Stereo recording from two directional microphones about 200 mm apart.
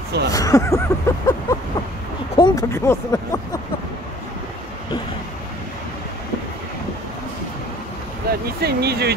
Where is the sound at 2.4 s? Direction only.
20° left (ahead or behind).